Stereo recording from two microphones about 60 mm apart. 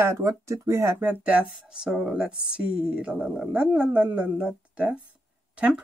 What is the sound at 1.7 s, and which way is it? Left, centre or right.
Speech, centre.